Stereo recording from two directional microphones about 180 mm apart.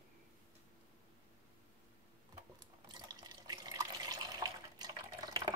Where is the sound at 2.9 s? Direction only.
20° right (ahead or behind).